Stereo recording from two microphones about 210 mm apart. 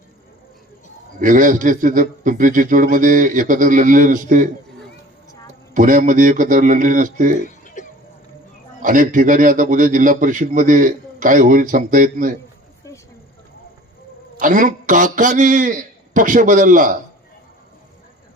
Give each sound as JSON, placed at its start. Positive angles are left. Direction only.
{"t": 1.2, "sound": "a man's voice", "side_deg": -40}
{"t": 5.7, "sound": "a man's voice", "side_deg": -40}
{"t": 7.4, "sound": "a sound", "side_deg": 35}
{"t": 8.8, "sound": "a man's voice", "side_deg": -40}
{"t": 14.3, "sound": "a man's voice", "side_deg": -40}